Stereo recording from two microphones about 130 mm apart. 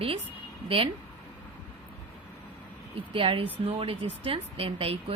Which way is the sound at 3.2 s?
45° right (ahead or behind).